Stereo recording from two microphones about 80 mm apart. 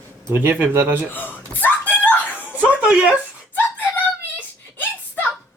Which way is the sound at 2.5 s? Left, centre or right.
Centre.